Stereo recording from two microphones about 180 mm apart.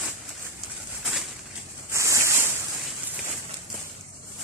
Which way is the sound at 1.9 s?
15° right (ahead or behind).